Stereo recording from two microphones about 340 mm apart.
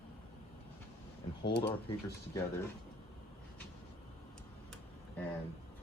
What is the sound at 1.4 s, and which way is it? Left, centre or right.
Speech, left.